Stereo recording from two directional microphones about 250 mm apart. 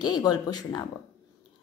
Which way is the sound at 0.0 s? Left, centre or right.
Centre.